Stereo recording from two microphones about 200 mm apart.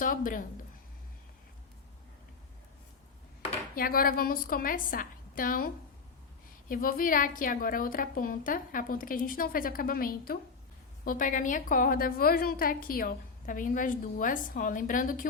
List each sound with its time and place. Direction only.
0.0 s a woman's voice: 45° left (ahead or behind)
3.8 s a woman's voice: 45° left (ahead or behind)